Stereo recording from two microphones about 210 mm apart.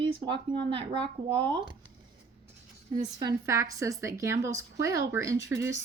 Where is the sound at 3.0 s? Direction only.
20° right (ahead or behind).